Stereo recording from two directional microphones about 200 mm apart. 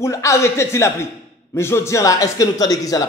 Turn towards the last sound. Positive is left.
turn(degrees=15)  # may be behind; listen again after turning